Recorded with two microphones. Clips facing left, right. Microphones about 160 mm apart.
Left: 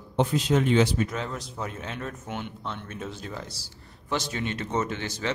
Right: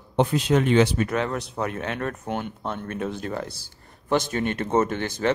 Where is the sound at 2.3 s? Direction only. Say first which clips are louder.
Right 5 dB; 50° right (ahead or behind).